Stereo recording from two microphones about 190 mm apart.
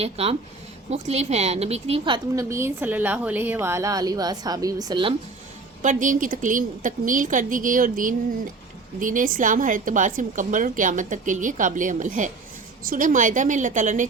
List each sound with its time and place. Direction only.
0.0 s a woman's voice: 30° right (ahead or behind)
5.8 s a woman's voice: 40° right (ahead or behind)